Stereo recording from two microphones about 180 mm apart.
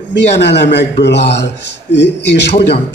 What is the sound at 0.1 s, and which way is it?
A man's voice, 70° left (ahead or behind).